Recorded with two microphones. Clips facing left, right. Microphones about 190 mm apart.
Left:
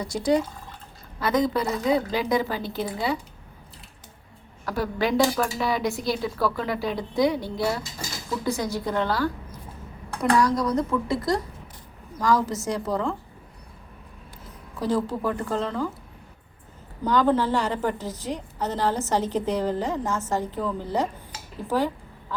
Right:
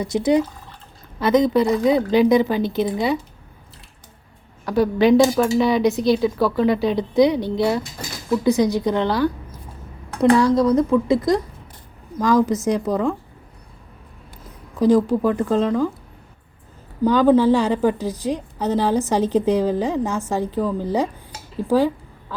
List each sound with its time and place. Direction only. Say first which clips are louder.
0.0 s speech: right 5 dB; 20° right (ahead or behind)
4.6 s a woman's voice: right 9 dB; 20° right (ahead or behind)
14.8 s a woman's voice: right 9 dB; 15° right (ahead or behind)
17.2 s a woman's voice: right 7 dB; 10° right (ahead or behind)
21.7 s a sound: right 7 dB; 10° right (ahead or behind)